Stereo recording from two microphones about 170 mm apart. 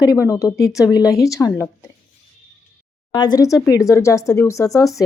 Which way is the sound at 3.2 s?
25° left (ahead or behind).